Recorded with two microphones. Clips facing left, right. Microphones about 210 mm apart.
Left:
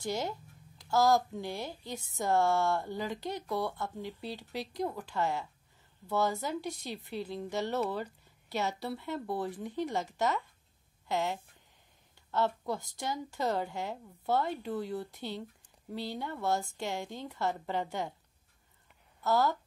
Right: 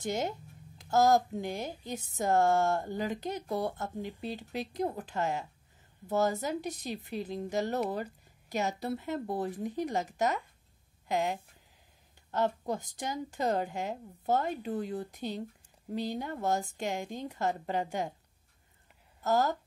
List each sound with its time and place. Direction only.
0.0 s speech: 20° right (ahead or behind)
3.6 s speech: 45° right (ahead or behind)
4.0 s speech: 20° right (ahead or behind)
6.1 s speech: 45° right (ahead or behind)
6.4 s speech: 15° right (ahead or behind)
11.1 s speech: 15° right (ahead or behind)
12.4 s speech: 15° right (ahead or behind)
19.2 s a woman's voice: 45° right (ahead or behind)